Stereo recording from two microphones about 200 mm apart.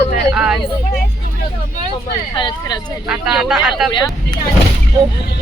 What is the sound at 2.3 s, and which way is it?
Speech, 25° left (ahead or behind).